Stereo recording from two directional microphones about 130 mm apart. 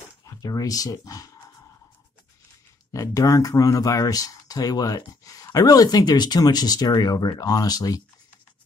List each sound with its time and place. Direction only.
0.4 s speech: 30° left (ahead or behind)
2.9 s speech: 25° left (ahead or behind)